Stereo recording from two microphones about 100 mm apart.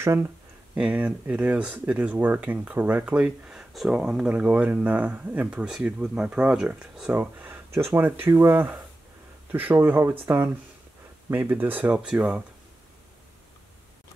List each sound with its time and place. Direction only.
0.0 s speech: 25° right (ahead or behind)
0.7 s speech: 10° right (ahead or behind)
3.3 s speech: 5° right (ahead or behind)